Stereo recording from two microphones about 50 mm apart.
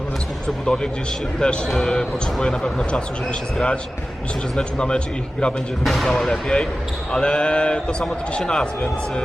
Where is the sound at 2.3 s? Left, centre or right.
Centre.